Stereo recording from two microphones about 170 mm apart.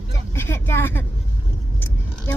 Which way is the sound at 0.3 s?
15° left (ahead or behind).